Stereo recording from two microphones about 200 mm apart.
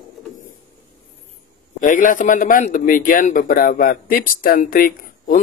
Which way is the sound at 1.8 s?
40° left (ahead or behind).